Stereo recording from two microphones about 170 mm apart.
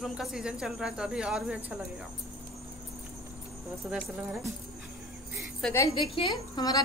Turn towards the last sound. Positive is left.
turn(degrees=25)  # may be behind; listen again after turning